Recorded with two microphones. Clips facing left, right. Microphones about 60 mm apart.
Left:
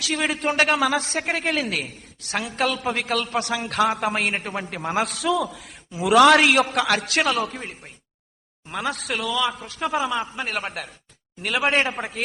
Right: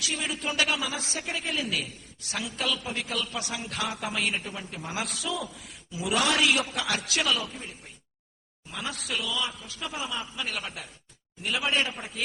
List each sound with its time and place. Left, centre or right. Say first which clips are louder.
0.0 s a man's voice: left 8 dB; left
6.4 s a man's voice: left 7 dB; left
6.9 s a man's voice: left 4 dB; left
10.3 s a man's voice: left 6 dB; left